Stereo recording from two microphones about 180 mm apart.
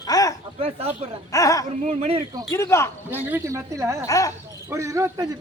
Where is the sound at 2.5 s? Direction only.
15° left (ahead or behind).